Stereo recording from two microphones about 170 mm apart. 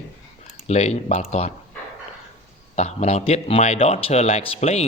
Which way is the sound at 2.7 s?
40° left (ahead or behind).